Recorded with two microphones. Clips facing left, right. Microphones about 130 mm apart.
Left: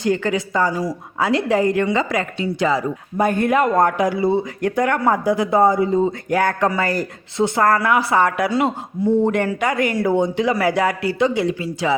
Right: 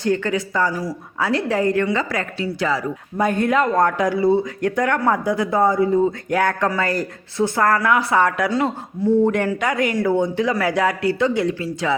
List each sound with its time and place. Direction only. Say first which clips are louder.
0.0 s a woman's voice: left 1 dB; 15° left (ahead or behind)
3.2 s a woman's voice: left 1 dB; centre (ahead or behind)
7.6 s a woman's voice: left 1 dB; 5° left (ahead or behind)
9.3 s a woman's voice: left 1 dB; 5° left (ahead or behind)